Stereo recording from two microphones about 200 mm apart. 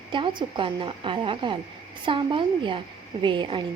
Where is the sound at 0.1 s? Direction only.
25° right (ahead or behind).